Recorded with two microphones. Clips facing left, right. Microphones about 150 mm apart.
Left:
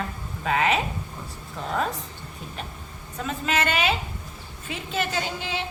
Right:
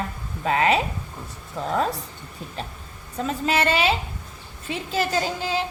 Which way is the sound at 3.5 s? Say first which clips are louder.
Right 3 dB; 35° right (ahead or behind).